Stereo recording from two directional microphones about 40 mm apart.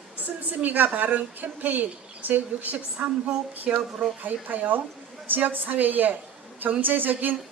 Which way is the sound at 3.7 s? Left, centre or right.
Right.